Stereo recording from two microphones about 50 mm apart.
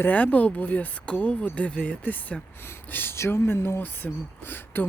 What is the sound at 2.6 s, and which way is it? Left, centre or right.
Speech, left.